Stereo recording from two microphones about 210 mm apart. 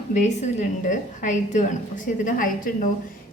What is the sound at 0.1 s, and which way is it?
A woman's voice, 35° left (ahead or behind).